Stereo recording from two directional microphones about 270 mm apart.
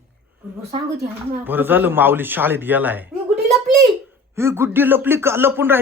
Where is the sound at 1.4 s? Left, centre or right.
Centre.